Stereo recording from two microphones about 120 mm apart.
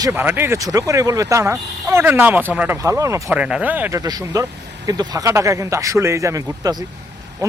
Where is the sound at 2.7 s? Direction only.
25° right (ahead or behind).